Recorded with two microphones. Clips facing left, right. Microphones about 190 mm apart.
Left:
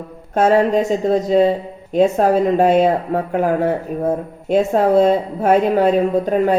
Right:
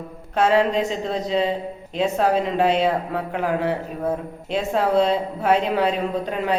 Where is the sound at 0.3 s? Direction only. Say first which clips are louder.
Left 4 dB; 45° left (ahead or behind).